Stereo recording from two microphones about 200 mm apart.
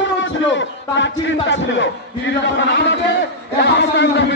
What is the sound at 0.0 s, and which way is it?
A man's voice, 65° left (ahead or behind).